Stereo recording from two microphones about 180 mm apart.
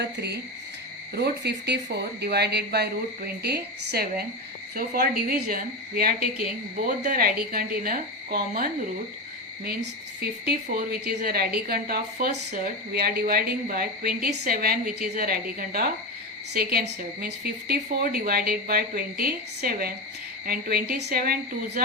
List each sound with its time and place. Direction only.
0.0 s a woman's voice: 65° right (ahead or behind)
6.7 s a woman's voice: 50° right (ahead or behind)
10.7 s a woman's voice: 55° right (ahead or behind)